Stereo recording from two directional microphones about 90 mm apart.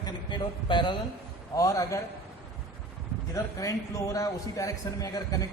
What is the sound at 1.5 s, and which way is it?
Speech, 40° left (ahead or behind).